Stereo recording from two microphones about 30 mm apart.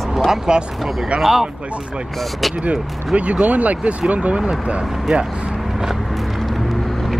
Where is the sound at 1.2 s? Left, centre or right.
Centre.